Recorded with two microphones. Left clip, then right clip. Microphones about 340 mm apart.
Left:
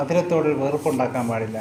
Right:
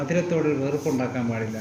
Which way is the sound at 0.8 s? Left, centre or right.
Left.